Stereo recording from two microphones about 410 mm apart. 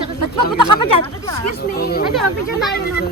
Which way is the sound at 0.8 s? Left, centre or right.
Centre.